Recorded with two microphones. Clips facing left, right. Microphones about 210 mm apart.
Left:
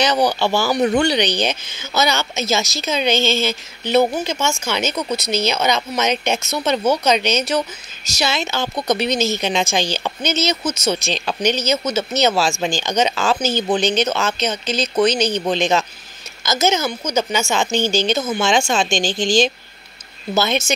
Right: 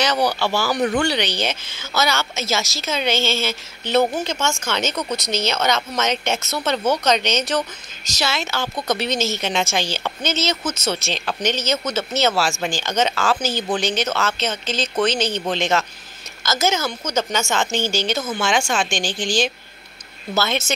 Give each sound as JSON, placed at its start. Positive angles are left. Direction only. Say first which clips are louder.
{"t": 0.0, "sound": "a woman's voice", "louder": "left 3 dB", "side_deg": 15}
{"t": 20.3, "sound": "speech", "louder": "left 3 dB", "side_deg": 15}